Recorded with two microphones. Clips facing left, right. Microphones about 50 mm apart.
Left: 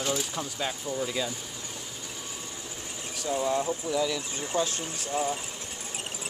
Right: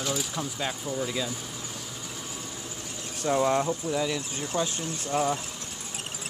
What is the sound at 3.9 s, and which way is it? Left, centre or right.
Speech, right.